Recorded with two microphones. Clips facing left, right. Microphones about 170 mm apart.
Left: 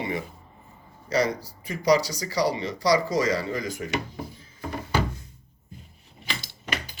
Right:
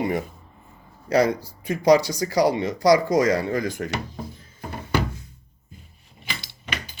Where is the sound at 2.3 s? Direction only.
50° right (ahead or behind); by 3.9 s 70° right (ahead or behind).